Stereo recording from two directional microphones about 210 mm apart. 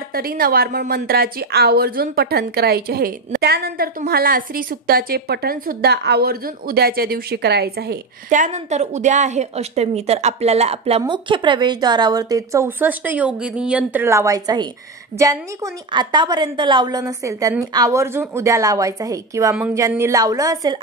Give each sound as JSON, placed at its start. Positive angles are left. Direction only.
{"t": 0.1, "sound": "a woman's voice", "side_deg": -45}